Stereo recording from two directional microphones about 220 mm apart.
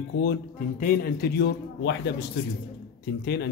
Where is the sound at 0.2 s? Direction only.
40° left (ahead or behind).